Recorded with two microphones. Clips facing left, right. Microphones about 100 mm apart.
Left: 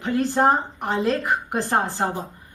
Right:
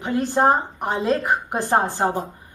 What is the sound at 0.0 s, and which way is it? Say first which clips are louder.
A woman's voice: right 1 dB; 20° right (ahead or behind).